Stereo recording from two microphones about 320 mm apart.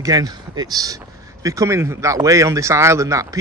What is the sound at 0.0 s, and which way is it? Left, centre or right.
Speech, centre.